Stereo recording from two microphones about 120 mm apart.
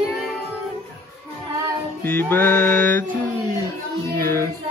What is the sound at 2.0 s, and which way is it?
Music, 15° left (ahead or behind).